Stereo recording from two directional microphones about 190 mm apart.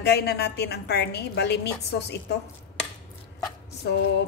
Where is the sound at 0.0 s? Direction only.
55° left (ahead or behind).